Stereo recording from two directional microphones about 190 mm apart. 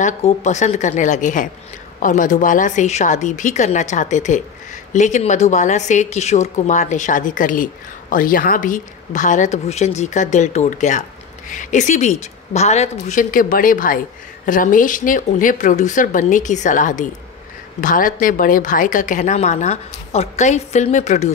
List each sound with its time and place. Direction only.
0.0 s a woman's voice: 40° left (ahead or behind)